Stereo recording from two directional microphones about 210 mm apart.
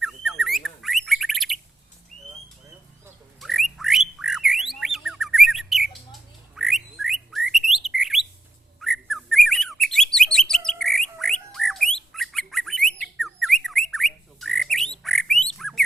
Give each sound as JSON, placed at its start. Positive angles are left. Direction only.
{"t": 0.0, "sound": "bird", "side_deg": 0}
{"t": 3.4, "sound": "bird", "side_deg": 0}